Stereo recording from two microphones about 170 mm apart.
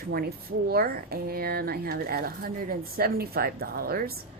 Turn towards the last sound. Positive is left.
turn(degrees=-65)  # may be behind; listen again after turning